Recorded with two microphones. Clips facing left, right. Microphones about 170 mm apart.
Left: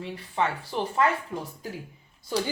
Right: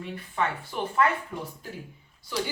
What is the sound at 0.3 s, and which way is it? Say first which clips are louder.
Speech: left 2 dB; 25° left (ahead or behind).